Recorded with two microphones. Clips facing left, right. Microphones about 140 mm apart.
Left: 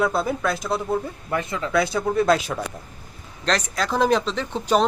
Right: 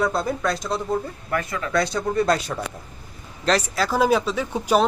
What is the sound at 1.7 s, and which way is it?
Speech, 5° left (ahead or behind).